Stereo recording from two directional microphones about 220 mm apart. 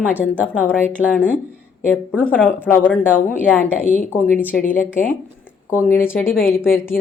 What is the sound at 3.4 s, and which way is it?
Speech, 10° left (ahead or behind).